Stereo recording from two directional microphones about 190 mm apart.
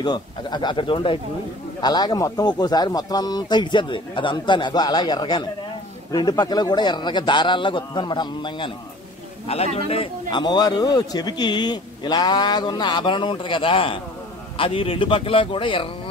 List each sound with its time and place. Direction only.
0.0 s speech: 20° left (ahead or behind)
9.8 s speech: 30° left (ahead or behind)